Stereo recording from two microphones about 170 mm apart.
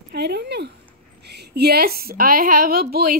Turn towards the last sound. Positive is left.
turn(degrees=-60)  # may be behind; listen again after turning